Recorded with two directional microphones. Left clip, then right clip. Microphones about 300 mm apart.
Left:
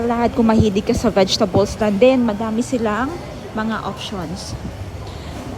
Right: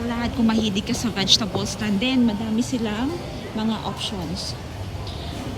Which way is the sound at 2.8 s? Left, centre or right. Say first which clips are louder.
Left 6 dB; left.